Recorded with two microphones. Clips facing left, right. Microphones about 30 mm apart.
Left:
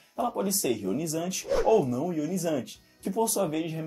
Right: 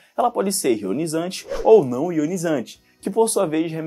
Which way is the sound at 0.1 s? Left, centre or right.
Right.